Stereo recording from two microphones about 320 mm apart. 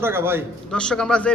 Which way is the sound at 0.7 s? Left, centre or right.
Centre.